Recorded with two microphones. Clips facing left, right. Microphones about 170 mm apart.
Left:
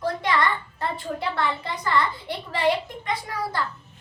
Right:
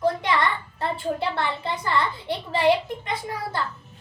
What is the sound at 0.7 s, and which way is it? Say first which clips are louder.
A child's voice: right 3 dB; 30° right (ahead or behind).